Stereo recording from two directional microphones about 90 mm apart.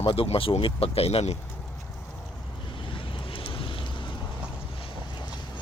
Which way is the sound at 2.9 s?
75° left (ahead or behind).